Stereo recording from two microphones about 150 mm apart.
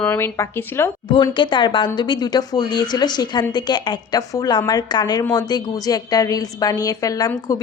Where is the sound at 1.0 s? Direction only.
35° left (ahead or behind).